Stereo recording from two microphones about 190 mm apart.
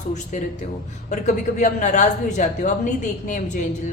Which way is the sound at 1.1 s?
40° left (ahead or behind).